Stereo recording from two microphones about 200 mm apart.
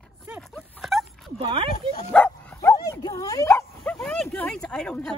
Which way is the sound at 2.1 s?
5° left (ahead or behind).